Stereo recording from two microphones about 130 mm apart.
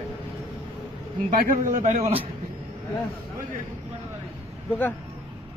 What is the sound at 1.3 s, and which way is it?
Speech, 85° right.